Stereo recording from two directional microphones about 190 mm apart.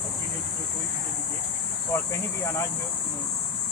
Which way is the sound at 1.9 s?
10° left (ahead or behind).